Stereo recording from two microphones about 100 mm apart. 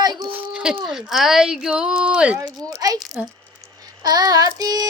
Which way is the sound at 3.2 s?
10° right (ahead or behind).